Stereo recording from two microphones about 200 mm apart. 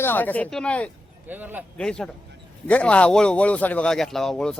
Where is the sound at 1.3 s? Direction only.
10° right (ahead or behind).